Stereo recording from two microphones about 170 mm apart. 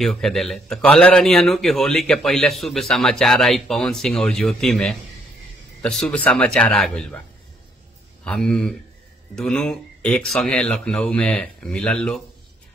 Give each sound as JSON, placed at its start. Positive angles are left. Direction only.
{"t": 0.0, "sound": "a man's voice", "side_deg": 0}
{"t": 8.2, "sound": "a man's voice", "side_deg": 5}